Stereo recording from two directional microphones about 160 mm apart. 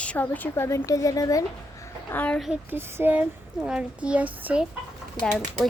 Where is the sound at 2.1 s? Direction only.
10° left (ahead or behind).